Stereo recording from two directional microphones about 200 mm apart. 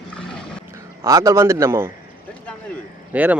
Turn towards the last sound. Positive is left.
turn(degrees=-10)  # may be behind; listen again after turning